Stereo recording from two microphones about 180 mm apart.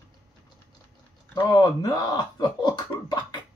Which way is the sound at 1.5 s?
20° left (ahead or behind).